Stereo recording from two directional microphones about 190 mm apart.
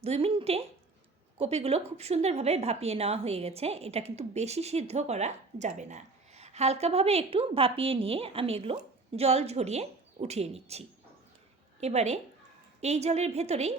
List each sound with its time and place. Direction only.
0.0 s a woman's voice: 30° right (ahead or behind)